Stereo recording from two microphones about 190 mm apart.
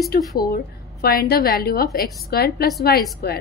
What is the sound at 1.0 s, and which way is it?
A woman's voice, 50° left (ahead or behind).